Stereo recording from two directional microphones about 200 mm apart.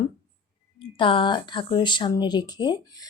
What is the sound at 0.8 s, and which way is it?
Speech, 25° left (ahead or behind).